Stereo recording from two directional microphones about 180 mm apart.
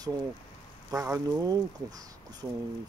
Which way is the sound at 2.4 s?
5° right (ahead or behind).